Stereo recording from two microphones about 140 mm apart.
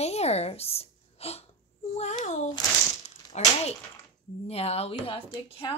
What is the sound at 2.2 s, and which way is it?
A woman's voice, 60° left (ahead or behind).